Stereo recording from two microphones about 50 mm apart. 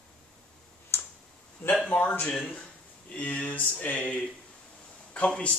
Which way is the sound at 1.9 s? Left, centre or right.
Left.